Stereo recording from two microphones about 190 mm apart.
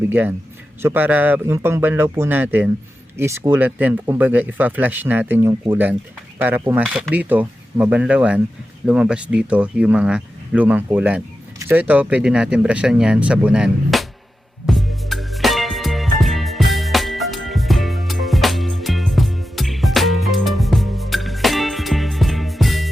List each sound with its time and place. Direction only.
0.1 s speech: 10° right (ahead or behind)
14.7 s music: centre (ahead or behind)